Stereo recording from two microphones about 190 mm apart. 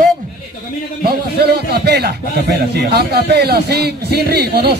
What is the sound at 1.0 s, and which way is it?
A man's voice, 55° right (ahead or behind).